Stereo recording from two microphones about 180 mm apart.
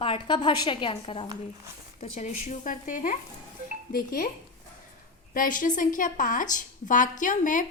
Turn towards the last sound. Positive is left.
turn(degrees=45)  # may be behind; listen again after turning